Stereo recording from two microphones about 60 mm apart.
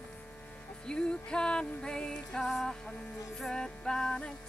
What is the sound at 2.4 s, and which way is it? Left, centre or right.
Music, centre.